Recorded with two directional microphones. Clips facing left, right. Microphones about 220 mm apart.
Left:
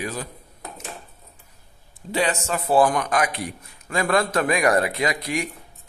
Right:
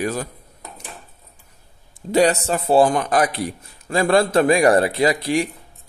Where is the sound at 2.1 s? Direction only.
35° right (ahead or behind).